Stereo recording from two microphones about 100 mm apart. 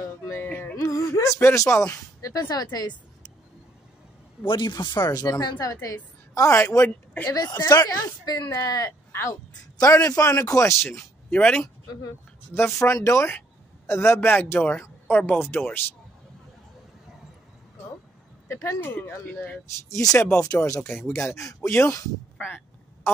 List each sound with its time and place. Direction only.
0.5 s music: 15° left (ahead or behind)
0.7 s music: 30° left (ahead or behind)
1.5 s speech: 30° left (ahead or behind)
4.5 s speech: 50° left (ahead or behind); by 7.3 s 30° left (ahead or behind)
7.3 s speech: 40° left (ahead or behind)
9.1 s speech: 25° left (ahead or behind)
11.2 s speech: 10° left (ahead or behind)
11.6 s speech: 35° left (ahead or behind)
12.5 s speech: 25° left (ahead or behind)
18.5 s speech: 30° left (ahead or behind)
19.9 s speech: 35° left (ahead or behind)
20.2 s speech: 20° left (ahead or behind)
21.5 s speech: 15° left (ahead or behind)